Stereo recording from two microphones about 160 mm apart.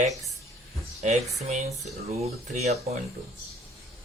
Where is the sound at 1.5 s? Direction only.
45° right (ahead or behind).